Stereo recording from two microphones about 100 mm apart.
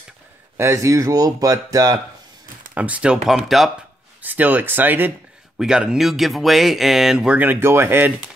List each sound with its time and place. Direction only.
0.6 s speech: 30° right (ahead or behind)
2.7 s speech: 15° right (ahead or behind)
4.2 s speech: 15° right (ahead or behind)
5.6 s speech: 5° right (ahead or behind)